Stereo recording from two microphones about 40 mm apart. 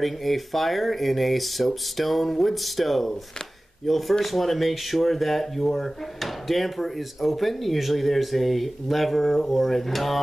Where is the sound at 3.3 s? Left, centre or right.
Centre.